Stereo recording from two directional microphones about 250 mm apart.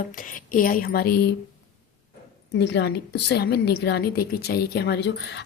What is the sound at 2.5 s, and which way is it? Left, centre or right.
Speech, left.